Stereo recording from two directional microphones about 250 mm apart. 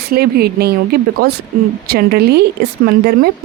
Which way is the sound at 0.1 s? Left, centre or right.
Right.